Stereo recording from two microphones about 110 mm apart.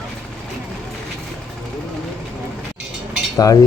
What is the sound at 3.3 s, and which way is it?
Speech, 35° left (ahead or behind).